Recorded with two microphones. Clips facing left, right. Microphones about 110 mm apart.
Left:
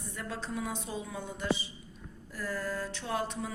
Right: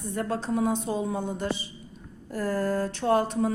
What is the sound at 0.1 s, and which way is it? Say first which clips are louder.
A woman's voice: right 10 dB; 45° right (ahead or behind).